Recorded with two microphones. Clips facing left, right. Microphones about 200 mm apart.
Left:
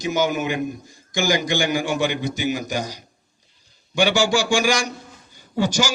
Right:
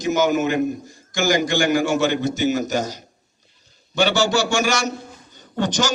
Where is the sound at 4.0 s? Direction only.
10° left (ahead or behind).